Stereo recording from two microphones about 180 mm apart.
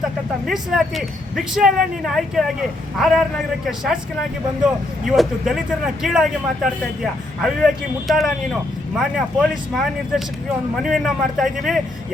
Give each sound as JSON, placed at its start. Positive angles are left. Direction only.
{"t": 0.4, "sound": "a man's voice", "side_deg": 0}